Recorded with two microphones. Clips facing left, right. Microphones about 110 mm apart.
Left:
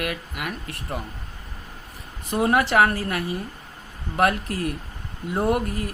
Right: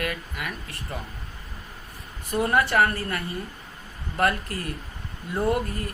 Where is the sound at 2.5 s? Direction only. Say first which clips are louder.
Left 2 dB; 75° left (ahead or behind).